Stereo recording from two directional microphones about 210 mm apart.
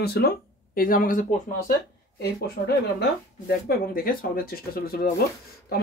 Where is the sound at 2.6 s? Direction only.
40° left (ahead or behind).